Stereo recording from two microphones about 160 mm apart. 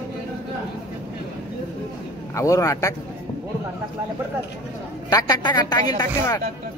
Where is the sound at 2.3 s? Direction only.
20° left (ahead or behind).